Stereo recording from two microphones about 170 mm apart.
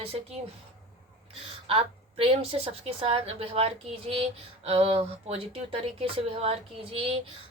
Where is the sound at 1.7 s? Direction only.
35° right (ahead or behind).